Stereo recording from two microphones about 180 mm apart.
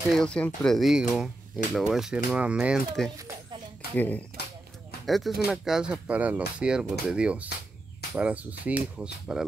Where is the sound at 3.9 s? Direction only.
10° left (ahead or behind).